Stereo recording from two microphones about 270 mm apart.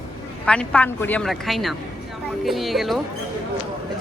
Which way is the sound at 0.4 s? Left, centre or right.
Centre.